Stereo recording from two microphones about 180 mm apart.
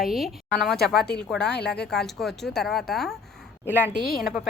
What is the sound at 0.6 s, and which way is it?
Speech, centre (ahead or behind).